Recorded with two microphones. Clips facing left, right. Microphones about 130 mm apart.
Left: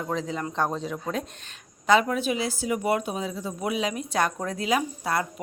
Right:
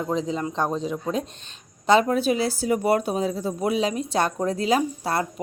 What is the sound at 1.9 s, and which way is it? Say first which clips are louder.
Speech: right 3 dB; 35° right (ahead or behind).